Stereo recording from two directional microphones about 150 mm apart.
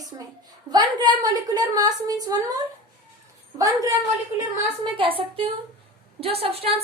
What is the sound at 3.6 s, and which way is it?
Speech, 20° right (ahead or behind).